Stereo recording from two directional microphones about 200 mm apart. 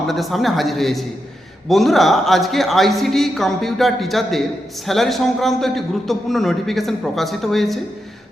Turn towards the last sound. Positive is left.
turn(degrees=0)  # may be behind; listen again after turning